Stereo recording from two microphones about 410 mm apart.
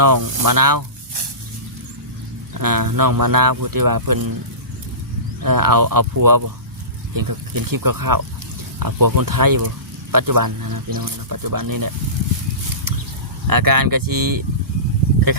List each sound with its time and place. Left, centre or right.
0.0 s speech: right
0.4 s a sound: right
2.6 s speech: right
5.4 s speech: right
13.5 s speech: right